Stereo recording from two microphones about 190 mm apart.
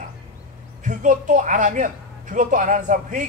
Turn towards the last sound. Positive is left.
turn(degrees=-40)  # may be behind; listen again after turning